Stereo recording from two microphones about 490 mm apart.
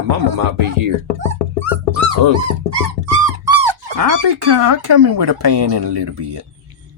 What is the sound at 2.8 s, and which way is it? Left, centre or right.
Speech, right.